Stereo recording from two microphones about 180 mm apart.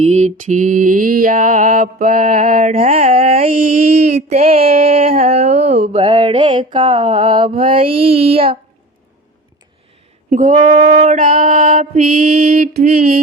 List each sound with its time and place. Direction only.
0.0 s female singing: 40° right (ahead or behind)
2.6 s mantra: 35° right (ahead or behind)
3.5 s female singing: 55° right (ahead or behind)
3.8 s mantra: 35° right (ahead or behind)
6.6 s female singing: 45° right (ahead or behind)
7.2 s mantra: 25° right (ahead or behind)
10.2 s female singing: 45° right (ahead or behind)